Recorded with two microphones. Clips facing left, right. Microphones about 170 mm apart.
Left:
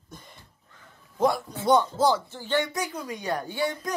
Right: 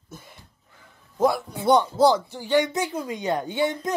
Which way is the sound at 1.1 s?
5° right (ahead or behind).